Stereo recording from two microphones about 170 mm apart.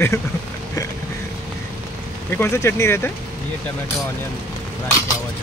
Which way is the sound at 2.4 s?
15° left (ahead or behind).